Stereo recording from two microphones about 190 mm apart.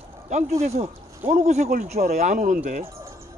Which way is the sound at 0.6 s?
35° right (ahead or behind).